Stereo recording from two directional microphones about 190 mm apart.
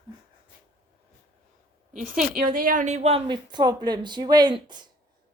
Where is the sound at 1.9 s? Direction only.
45° right (ahead or behind); by 4.9 s 25° right (ahead or behind).